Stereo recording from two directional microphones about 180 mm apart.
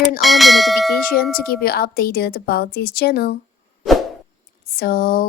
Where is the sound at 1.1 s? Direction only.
55° left (ahead or behind).